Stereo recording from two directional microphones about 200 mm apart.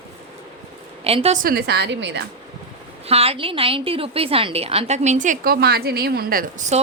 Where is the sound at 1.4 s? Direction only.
50° right (ahead or behind).